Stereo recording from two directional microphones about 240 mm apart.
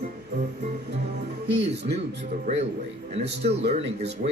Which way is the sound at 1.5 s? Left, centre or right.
Right.